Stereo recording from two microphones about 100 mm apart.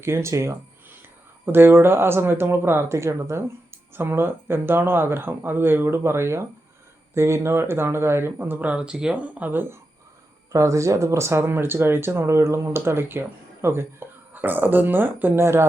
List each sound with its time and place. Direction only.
0.0 s speech: 25° right (ahead or behind)
10.5 s speech: 30° right (ahead or behind)